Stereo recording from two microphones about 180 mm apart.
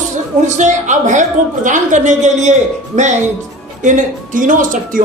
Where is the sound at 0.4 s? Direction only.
40° right (ahead or behind).